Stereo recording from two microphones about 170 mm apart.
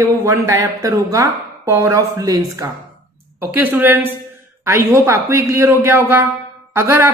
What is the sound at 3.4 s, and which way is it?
A man's voice, 10° right (ahead or behind).